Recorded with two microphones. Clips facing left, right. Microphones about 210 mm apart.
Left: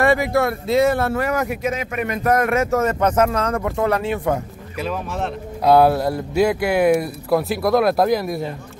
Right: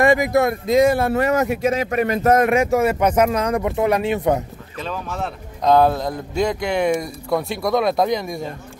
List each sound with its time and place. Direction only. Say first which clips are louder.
0.0 s speech: right 1 dB; 15° right (ahead or behind)
4.7 s speech: left 2 dB; 5° left (ahead or behind)